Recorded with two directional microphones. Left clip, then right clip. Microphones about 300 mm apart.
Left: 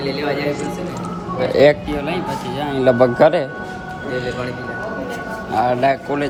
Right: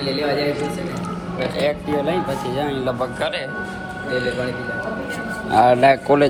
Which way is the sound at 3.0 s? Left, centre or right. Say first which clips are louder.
Left 10 dB; left.